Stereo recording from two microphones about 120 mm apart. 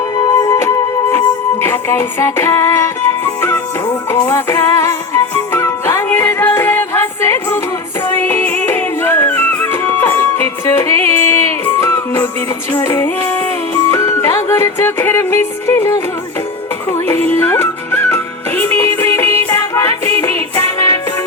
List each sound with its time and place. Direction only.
0.2 s music: 35° left (ahead or behind)
0.6 s music: 20° left (ahead or behind)
4.3 s music: 20° left (ahead or behind)
17.2 s music: 20° left (ahead or behind)